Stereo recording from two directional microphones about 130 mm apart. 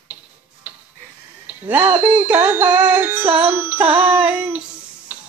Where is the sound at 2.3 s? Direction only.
15° right (ahead or behind).